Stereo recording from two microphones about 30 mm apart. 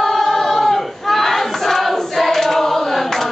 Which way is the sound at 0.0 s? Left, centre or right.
Centre.